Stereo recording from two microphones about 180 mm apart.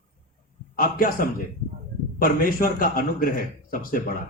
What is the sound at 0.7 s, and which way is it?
A man's voice, 50° left (ahead or behind).